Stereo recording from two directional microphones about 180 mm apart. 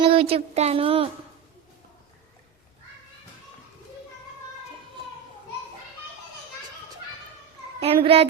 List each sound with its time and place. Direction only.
0.0 s speech: 30° right (ahead or behind)
7.8 s a child's voice: 30° right (ahead or behind)